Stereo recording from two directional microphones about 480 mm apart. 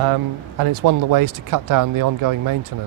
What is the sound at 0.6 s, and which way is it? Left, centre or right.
Speech, right.